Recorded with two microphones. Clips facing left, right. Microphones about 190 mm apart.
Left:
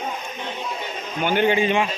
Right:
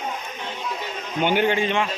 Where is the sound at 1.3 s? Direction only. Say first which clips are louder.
Left 4 dB; 5° left (ahead or behind).